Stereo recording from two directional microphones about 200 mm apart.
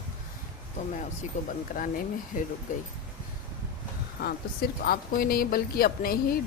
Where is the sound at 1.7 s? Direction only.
40° left (ahead or behind).